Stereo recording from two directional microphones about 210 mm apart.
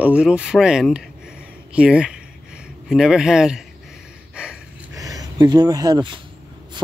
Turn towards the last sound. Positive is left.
turn(degrees=-20)  # may be behind; listen again after turning